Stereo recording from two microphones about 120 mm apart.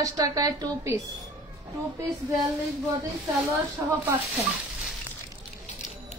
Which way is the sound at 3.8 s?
20° right (ahead or behind).